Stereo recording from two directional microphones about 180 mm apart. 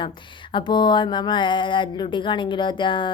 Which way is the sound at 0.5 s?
25° left (ahead or behind).